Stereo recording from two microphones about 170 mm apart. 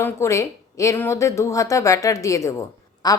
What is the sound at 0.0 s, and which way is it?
A woman's voice, 15° left (ahead or behind).